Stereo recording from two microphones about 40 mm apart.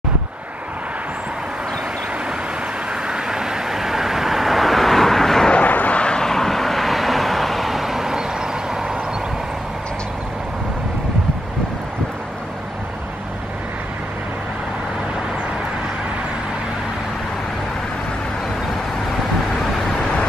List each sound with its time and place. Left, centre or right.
2.9 s vehicle: centre
5.5 s vehicle: left
6.2 s vehicle: centre